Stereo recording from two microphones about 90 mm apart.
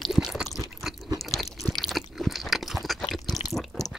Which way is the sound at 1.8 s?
Centre (ahead or behind).